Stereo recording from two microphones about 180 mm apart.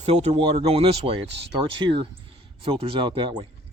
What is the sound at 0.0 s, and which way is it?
Speech, 35° right (ahead or behind).